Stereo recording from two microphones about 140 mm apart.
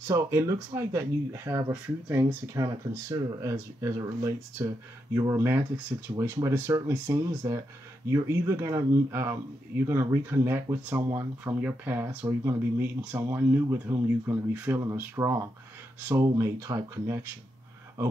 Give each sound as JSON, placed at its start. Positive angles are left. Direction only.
{"t": 0.1, "sound": "speech", "side_deg": -20}